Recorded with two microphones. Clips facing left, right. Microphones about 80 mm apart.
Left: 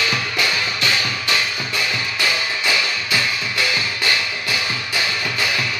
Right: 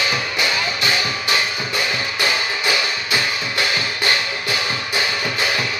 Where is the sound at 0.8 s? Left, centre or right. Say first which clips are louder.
Right 1 dB; centre.